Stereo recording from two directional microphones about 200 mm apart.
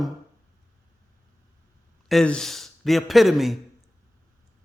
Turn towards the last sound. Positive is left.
turn(degrees=0)  # may be behind; listen again after turning